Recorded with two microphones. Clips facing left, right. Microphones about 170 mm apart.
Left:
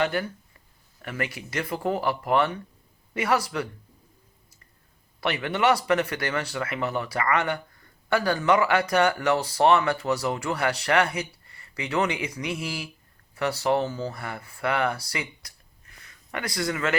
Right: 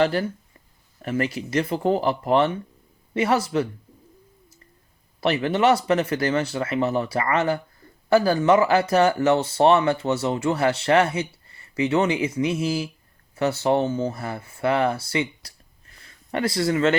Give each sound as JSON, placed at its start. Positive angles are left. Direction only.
{"t": 0.0, "sound": "speech", "side_deg": -30}
{"t": 5.2, "sound": "speech", "side_deg": -25}